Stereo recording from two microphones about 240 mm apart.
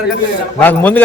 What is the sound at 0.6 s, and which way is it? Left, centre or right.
Speech, centre.